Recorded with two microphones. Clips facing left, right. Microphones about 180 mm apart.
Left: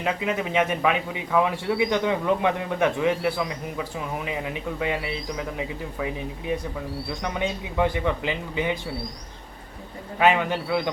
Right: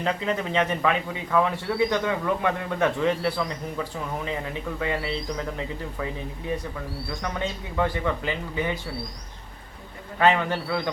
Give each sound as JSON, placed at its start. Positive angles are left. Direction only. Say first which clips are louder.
{"t": 0.0, "sound": "speech", "louder": "even", "side_deg": 10}
{"t": 7.2, "sound": "speech", "louder": "left 2 dB", "side_deg": 15}
{"t": 10.2, "sound": "speech", "louder": "left 1 dB", "side_deg": 10}